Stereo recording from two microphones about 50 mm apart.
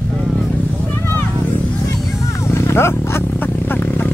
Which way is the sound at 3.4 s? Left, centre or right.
Left.